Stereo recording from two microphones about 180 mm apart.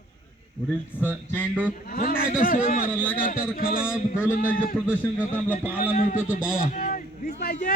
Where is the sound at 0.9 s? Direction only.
10° left (ahead or behind).